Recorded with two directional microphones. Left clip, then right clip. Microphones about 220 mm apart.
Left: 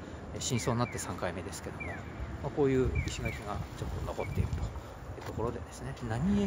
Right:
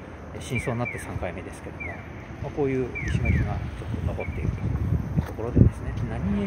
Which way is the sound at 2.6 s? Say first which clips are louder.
Right 3 dB; 20° left (ahead or behind).